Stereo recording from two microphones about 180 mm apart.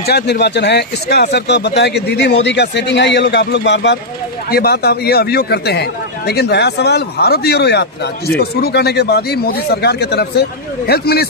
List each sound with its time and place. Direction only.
0.0 s speech: 65° left (ahead or behind)
4.5 s a man's voice: 60° left (ahead or behind)